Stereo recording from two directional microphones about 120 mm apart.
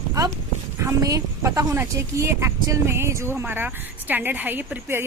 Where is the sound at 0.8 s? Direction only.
25° right (ahead or behind).